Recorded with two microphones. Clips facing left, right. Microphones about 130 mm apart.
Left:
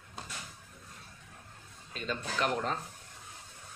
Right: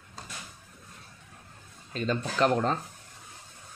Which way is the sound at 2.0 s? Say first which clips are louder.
Right 7 dB; 35° right (ahead or behind).